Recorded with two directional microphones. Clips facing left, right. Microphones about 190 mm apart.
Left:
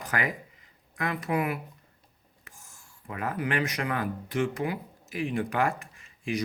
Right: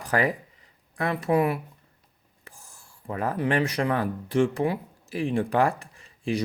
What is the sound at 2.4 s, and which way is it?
Speech, 35° right (ahead or behind).